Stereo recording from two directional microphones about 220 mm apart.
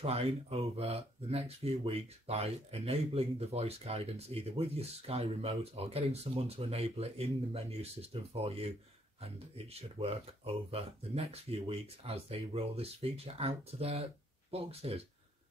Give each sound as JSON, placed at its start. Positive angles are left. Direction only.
{"t": 0.0, "sound": "speech", "side_deg": -25}